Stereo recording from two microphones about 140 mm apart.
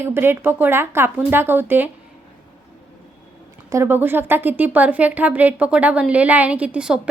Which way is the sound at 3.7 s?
20° right (ahead or behind).